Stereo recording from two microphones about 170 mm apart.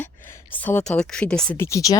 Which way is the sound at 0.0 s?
10° left (ahead or behind).